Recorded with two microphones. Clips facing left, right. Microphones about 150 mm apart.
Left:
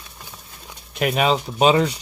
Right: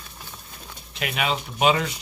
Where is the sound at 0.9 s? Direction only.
40° left (ahead or behind).